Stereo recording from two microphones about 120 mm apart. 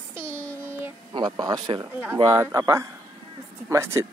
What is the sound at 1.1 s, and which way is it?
Speech, 35° right (ahead or behind).